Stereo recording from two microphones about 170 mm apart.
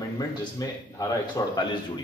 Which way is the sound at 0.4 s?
20° left (ahead or behind).